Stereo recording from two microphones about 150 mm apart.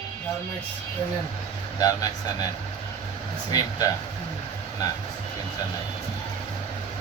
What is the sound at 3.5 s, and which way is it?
Speech, 25° left (ahead or behind).